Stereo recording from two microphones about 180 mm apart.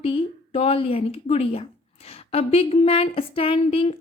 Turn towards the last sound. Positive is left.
turn(degrees=30)  # may be behind; listen again after turning